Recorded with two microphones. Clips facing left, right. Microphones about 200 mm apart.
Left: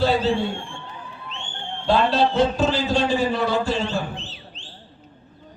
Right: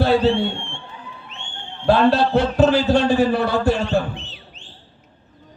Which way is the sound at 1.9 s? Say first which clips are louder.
Right 4 dB; 60° right (ahead or behind).